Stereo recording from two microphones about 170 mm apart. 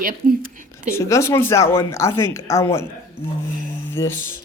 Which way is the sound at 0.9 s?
15° left (ahead or behind).